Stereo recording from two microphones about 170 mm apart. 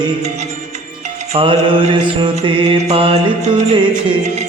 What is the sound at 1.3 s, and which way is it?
Mantra, 30° right (ahead or behind).